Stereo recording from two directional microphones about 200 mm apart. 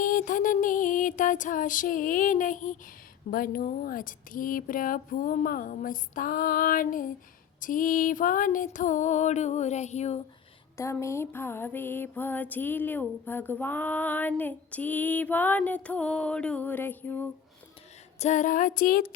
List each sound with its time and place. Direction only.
0.0 s music: 40° left (ahead or behind)
3.2 s speech: 45° left (ahead or behind)
7.6 s music: 45° left (ahead or behind)
11.0 s music: 15° left (ahead or behind)
18.2 s music: 35° left (ahead or behind)